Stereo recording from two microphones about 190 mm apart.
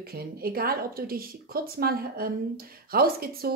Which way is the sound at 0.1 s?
55° right (ahead or behind).